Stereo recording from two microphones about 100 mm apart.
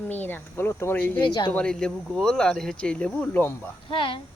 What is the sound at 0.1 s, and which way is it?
Speech, 20° left (ahead or behind).